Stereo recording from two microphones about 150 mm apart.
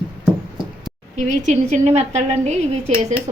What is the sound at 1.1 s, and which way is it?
A woman's voice, 50° right (ahead or behind).